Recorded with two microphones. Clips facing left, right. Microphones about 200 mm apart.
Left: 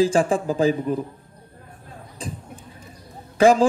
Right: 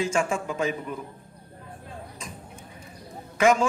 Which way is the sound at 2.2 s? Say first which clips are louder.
Left 8 dB; 35° left (ahead or behind).